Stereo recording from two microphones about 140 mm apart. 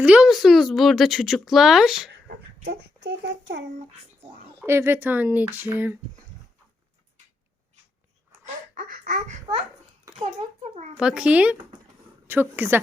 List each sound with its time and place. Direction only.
0.0 s speech: 5° right (ahead or behind)
4.6 s speech: 15° right (ahead or behind)
8.7 s a child's voice: 85° right; by 10.9 s 60° right (ahead or behind)
10.9 s speech: 5° right (ahead or behind)